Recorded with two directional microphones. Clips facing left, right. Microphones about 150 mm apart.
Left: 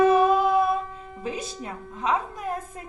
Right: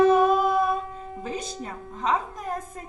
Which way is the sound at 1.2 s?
40° right (ahead or behind).